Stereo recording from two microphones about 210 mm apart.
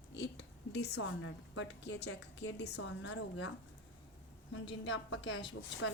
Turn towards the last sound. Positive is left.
turn(degrees=60)  # may be behind; listen again after turning